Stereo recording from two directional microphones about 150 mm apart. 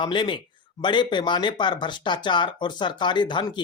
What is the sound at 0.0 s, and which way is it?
Speech, 30° left (ahead or behind).